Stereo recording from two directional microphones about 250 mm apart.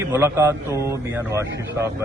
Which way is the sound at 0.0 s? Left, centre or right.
Centre.